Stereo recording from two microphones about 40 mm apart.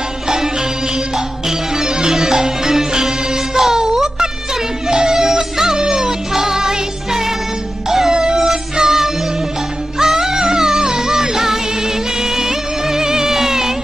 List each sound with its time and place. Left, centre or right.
1.8 s music: centre
3.5 s a sound: centre
4.8 s music: centre